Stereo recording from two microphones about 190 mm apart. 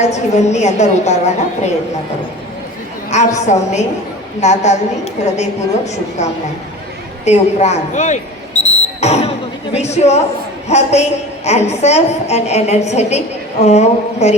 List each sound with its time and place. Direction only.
0.0 s a woman's voice: 35° left (ahead or behind)
3.4 s a woman's voice: 35° left (ahead or behind)